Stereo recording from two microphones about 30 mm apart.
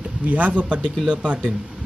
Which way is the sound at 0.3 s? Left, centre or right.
Right.